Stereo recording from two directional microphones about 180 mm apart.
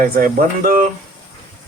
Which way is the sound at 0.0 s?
55° right (ahead or behind).